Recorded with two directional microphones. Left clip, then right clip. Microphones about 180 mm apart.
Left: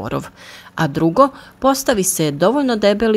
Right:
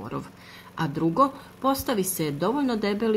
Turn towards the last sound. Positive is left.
turn(degrees=40)  # may be behind; listen again after turning